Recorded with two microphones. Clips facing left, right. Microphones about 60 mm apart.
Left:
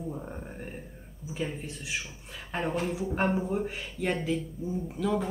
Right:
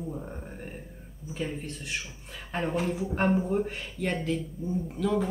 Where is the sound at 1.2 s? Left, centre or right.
Centre.